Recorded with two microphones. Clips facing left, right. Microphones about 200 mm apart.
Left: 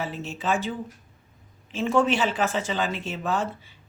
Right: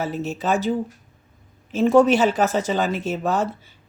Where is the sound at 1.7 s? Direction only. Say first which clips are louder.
Right 7 dB; 40° right (ahead or behind).